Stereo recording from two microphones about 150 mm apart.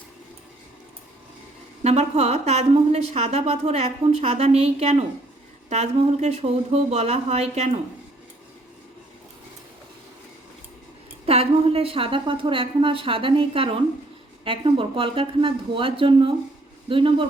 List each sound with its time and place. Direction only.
1.8 s a woman's voice: 45° right (ahead or behind)
11.3 s a woman's voice: 40° right (ahead or behind)